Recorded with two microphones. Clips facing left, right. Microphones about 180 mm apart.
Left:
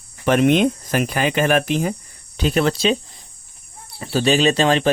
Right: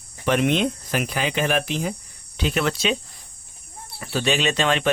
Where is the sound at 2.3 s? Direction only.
40° left (ahead or behind).